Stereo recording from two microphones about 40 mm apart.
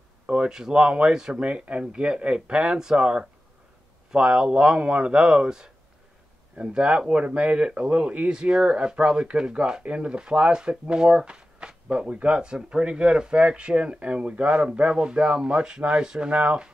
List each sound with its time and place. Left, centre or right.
0.3 s speech: right